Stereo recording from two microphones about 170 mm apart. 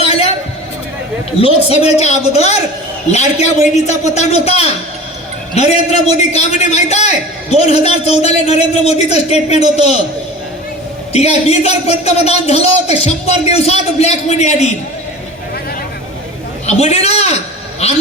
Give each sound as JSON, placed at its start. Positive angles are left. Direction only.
{"t": 1.4, "sound": "a man's voice", "side_deg": 35}
{"t": 11.1, "sound": "a man's voice", "side_deg": 40}
{"t": 16.6, "sound": "a man's voice", "side_deg": 40}